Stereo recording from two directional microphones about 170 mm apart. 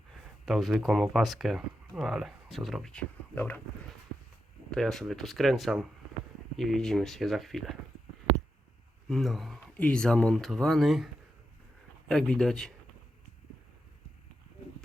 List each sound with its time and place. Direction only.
0.4 s speech: centre (ahead or behind)
4.7 s speech: centre (ahead or behind)
9.0 s speech: centre (ahead or behind)